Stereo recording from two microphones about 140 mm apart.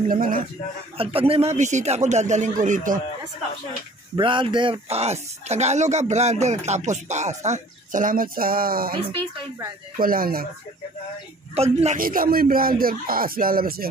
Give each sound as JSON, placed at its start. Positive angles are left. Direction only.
{"t": 0.1, "sound": "speech", "side_deg": -80}
{"t": 0.9, "sound": "speech", "side_deg": -40}
{"t": 4.2, "sound": "speech", "side_deg": -35}
{"t": 8.9, "sound": "speech", "side_deg": -35}
{"t": 9.9, "sound": "speech", "side_deg": -90}
{"t": 11.5, "sound": "speech", "side_deg": -50}
{"t": 12.0, "sound": "speech", "side_deg": -90}